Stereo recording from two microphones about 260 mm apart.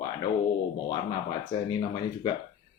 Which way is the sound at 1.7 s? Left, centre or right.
Centre.